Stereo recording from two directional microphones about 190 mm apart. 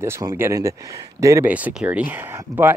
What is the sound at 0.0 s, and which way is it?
Speech, 15° right (ahead or behind).